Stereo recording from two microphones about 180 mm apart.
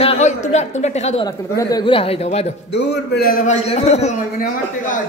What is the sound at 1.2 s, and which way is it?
Speech, 20° left (ahead or behind).